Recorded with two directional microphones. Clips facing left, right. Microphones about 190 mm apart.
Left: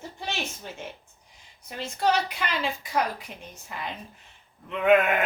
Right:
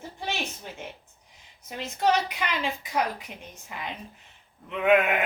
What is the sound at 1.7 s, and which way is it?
A woman's voice, 15° right (ahead or behind).